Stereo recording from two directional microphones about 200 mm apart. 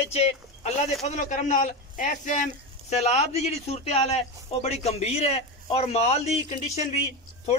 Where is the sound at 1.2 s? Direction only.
40° left (ahead or behind).